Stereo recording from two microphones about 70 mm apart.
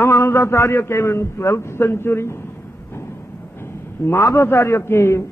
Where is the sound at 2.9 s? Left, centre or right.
Left.